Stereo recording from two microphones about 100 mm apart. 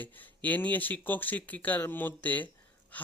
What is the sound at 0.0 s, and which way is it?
Speech, 15° left (ahead or behind).